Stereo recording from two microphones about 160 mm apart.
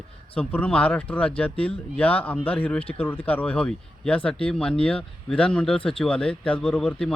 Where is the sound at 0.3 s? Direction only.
10° left (ahead or behind).